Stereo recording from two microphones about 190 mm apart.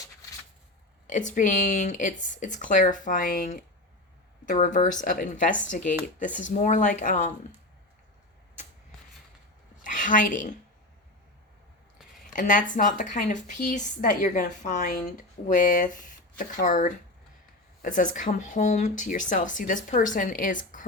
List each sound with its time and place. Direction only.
1.0 s speech: 40° left (ahead or behind)
9.8 s a woman's voice: 40° left (ahead or behind)
12.2 s speech: 45° left (ahead or behind)